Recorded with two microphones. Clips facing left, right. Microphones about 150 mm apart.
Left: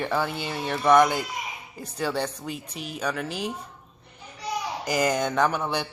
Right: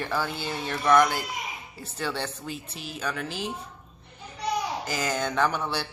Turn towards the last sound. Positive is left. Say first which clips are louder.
# left 2 dB
turn(degrees=10)  # may be behind; listen again after turning